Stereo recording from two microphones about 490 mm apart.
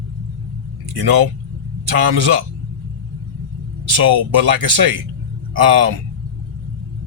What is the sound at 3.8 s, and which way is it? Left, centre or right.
Speech, right.